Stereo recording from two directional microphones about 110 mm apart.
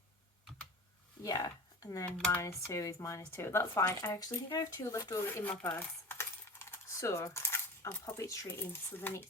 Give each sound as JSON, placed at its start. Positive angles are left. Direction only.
{"t": 1.2, "sound": "speech", "side_deg": 35}
{"t": 5.4, "sound": "coin", "side_deg": 20}